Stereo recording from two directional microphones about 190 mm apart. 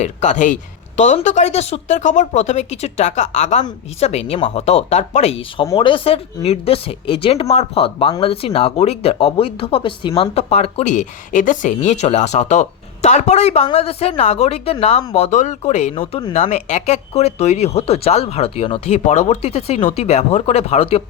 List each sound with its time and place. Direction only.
0.0 s speech: 40° left (ahead or behind)